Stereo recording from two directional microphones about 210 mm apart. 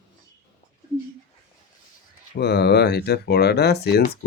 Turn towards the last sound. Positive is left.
turn(degrees=50)  # may be behind; listen again after turning